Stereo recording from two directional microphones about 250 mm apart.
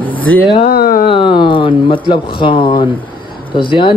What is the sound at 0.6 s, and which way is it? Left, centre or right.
Speech, left.